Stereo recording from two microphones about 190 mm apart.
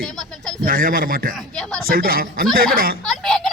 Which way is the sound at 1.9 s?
50° right (ahead or behind).